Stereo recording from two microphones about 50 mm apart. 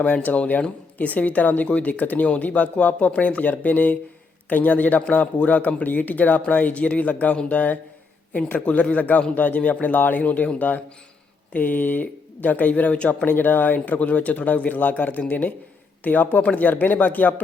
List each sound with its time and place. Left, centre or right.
0.0 s speech: left
13.2 s speech: left